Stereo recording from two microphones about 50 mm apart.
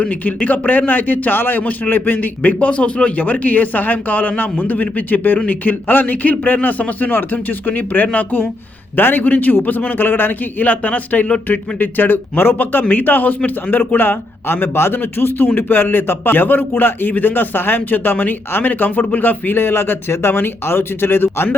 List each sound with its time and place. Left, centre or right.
0.0 s a man's voice: left